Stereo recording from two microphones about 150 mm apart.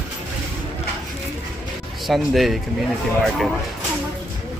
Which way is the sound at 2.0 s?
Centre (ahead or behind).